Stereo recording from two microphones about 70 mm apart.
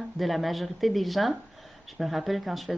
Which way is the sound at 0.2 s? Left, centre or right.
Centre.